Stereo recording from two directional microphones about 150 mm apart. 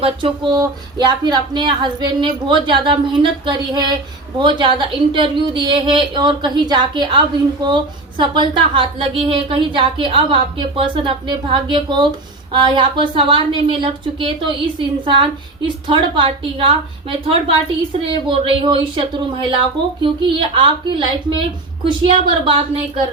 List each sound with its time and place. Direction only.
0.0 s a woman's voice: 35° right (ahead or behind)
8.2 s a woman's voice: 30° right (ahead or behind)